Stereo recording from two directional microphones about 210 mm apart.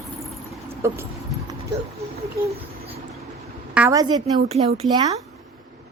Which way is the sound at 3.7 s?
15° right (ahead or behind).